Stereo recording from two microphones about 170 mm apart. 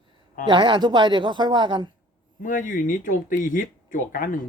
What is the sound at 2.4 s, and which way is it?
Speech, 50° left (ahead or behind).